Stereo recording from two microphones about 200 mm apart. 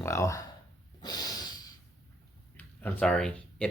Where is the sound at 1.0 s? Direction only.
20° left (ahead or behind).